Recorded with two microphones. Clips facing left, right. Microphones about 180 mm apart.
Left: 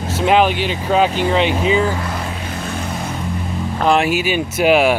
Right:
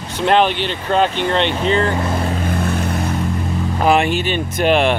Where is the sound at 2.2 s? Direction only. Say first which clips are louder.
Right 6 dB; 50° right (ahead or behind).